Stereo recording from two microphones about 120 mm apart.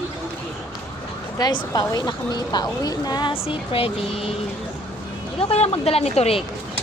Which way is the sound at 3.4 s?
50° left (ahead or behind).